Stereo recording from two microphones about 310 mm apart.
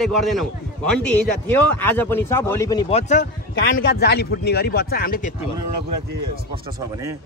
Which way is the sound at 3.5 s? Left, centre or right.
Left.